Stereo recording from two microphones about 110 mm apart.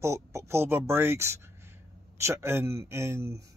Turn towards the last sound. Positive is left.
turn(degrees=-25)  # may be behind; listen again after turning